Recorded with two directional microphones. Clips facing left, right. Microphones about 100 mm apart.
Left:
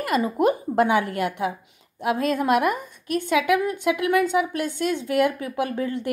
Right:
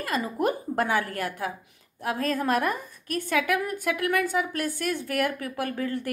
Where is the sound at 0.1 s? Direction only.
25° left (ahead or behind).